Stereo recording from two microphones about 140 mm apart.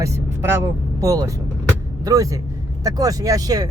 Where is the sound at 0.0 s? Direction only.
15° right (ahead or behind).